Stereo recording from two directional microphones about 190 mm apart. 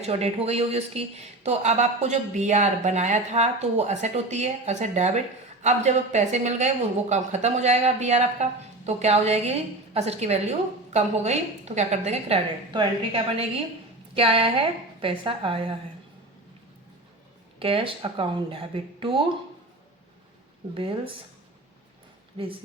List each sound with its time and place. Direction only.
0.0 s speech: 35° right (ahead or behind)
17.6 s speech: 30° right (ahead or behind)
20.7 s speech: 30° right (ahead or behind)